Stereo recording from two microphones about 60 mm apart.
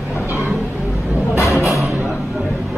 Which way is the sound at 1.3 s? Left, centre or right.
Left.